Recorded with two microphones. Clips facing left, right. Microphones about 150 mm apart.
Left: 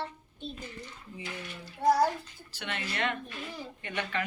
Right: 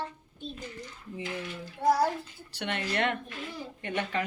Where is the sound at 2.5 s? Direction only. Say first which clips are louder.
Right 5 dB; 60° right (ahead or behind).